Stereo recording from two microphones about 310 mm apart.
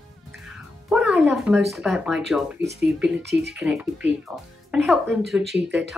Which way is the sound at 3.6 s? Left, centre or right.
Centre.